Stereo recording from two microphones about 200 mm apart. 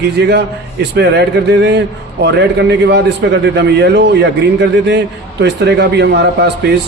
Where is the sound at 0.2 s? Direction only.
55° right (ahead or behind).